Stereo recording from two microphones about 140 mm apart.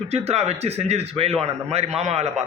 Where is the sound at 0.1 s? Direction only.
50° right (ahead or behind).